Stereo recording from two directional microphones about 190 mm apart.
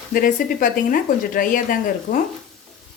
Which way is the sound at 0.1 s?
45° left (ahead or behind).